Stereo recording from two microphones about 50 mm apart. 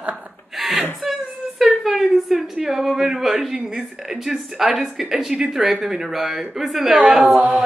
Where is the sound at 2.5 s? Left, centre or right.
Centre.